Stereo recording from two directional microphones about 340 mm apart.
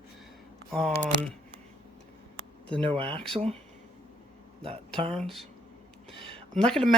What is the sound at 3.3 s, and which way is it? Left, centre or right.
Speech, centre.